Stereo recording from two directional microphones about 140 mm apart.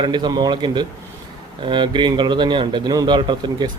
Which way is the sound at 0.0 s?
30° right (ahead or behind).